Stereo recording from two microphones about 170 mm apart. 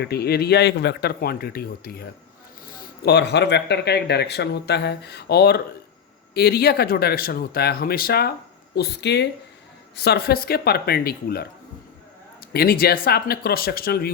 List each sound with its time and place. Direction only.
0.0 s speech: 70° left (ahead or behind)
3.0 s speech: 80° left
9.9 s speech: 70° left (ahead or behind)
12.5 s speech: 60° left (ahead or behind)